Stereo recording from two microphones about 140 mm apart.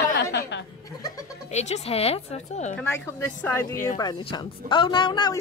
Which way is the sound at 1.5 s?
50° left (ahead or behind).